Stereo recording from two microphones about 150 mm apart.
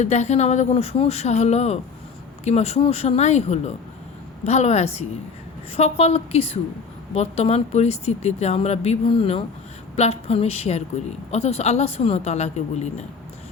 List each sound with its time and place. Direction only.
0.0 s a woman's voice: 50° left (ahead or behind)